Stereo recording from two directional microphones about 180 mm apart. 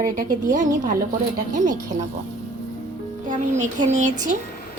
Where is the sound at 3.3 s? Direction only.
40° right (ahead or behind).